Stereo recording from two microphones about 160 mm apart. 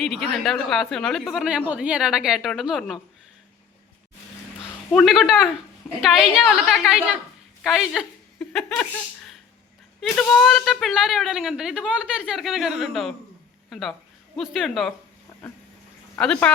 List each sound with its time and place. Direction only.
0.0 s a woman's voice: centre (ahead or behind)
4.9 s a woman's voice: centre (ahead or behind)
16.1 s speech: 5° left (ahead or behind)